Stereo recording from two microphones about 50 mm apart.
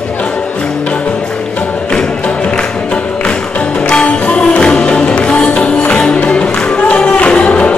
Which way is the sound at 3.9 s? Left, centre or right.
Left.